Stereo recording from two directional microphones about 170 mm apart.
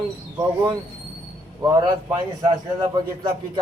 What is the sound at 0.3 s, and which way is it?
A man's voice, 25° right (ahead or behind).